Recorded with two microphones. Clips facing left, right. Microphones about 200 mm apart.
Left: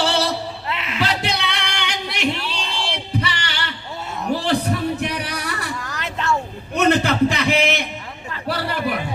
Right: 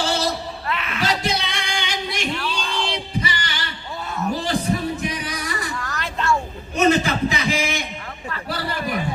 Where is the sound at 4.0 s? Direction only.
25° left (ahead or behind).